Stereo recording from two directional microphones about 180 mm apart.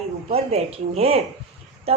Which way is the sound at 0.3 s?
35° right (ahead or behind).